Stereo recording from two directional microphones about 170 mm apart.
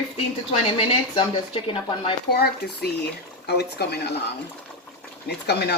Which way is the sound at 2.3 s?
65° left (ahead or behind).